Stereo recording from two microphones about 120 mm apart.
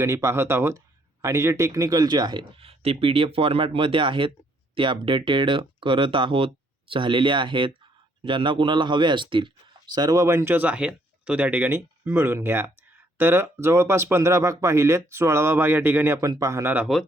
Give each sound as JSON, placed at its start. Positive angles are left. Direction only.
{"t": 0.0, "sound": "speech", "side_deg": -25}
{"t": 2.4, "sound": "speech", "side_deg": -55}
{"t": 16.2, "sound": "speech", "side_deg": -30}
{"t": 16.7, "sound": "speech", "side_deg": -5}